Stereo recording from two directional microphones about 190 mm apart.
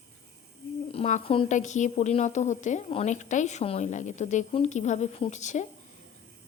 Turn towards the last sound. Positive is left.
turn(degrees=40)  # may be behind; listen again after turning